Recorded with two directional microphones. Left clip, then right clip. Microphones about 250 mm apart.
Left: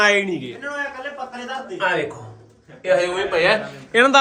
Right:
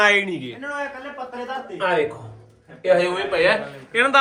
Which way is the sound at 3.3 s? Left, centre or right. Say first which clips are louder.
Left 2 dB; centre.